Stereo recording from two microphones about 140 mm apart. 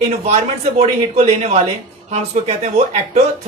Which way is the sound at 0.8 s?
50° right (ahead or behind).